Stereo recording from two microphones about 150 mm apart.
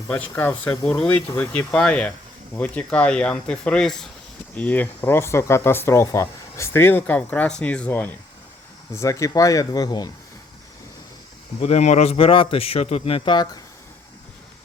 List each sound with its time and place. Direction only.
0.1 s speech: 10° left (ahead or behind)
11.6 s a man's voice: 50° left (ahead or behind); by 13.6 s 30° left (ahead or behind)